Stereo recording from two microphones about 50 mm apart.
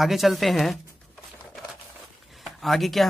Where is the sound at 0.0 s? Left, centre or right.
Centre.